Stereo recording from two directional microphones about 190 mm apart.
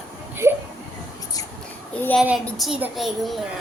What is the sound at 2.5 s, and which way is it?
Speech, centre (ahead or behind).